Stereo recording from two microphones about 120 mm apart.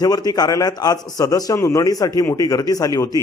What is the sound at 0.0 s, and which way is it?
A man's voice, 30° left (ahead or behind).